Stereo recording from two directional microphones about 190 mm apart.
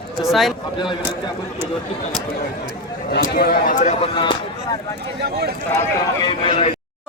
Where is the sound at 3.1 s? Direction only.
55° left (ahead or behind); by 4.1 s 40° left (ahead or behind).